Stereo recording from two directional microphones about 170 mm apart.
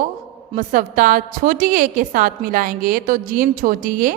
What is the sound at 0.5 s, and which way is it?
A woman's voice, 50° right (ahead or behind).